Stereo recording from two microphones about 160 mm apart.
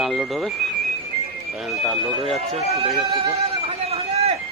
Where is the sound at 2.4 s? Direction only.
40° right (ahead or behind).